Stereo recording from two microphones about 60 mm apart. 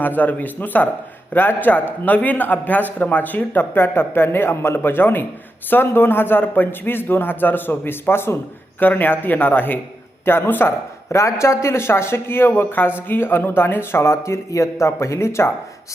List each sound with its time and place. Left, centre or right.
0.0 s a man's voice: left